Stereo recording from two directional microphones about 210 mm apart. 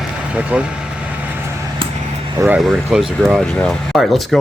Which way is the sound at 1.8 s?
25° right (ahead or behind).